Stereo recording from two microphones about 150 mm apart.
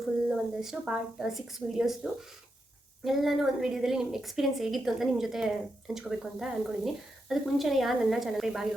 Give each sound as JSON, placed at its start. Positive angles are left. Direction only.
{"t": 0.6, "sound": "a woman's voice", "side_deg": -5}
{"t": 3.0, "sound": "a woman's voice", "side_deg": 0}